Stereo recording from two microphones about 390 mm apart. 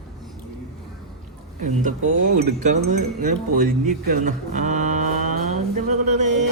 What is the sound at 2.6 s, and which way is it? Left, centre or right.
Speech, centre.